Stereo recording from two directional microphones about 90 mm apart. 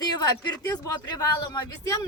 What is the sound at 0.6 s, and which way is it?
Speech, 40° left (ahead or behind).